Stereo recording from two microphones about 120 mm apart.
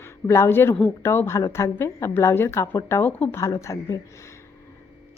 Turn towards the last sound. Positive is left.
turn(degrees=25)  # may be behind; listen again after turning